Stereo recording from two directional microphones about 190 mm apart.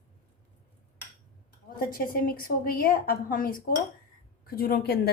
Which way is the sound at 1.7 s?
50° left (ahead or behind).